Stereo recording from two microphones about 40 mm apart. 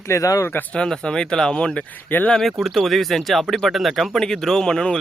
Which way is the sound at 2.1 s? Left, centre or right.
Left.